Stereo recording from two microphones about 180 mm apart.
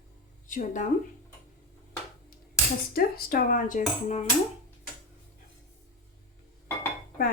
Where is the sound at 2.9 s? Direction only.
55° left (ahead or behind).